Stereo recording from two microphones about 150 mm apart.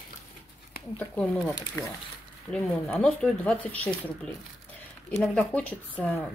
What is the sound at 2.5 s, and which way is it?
Speech, 5° left (ahead or behind).